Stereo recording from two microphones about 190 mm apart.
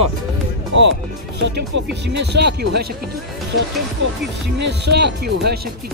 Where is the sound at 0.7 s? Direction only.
75° right (ahead or behind).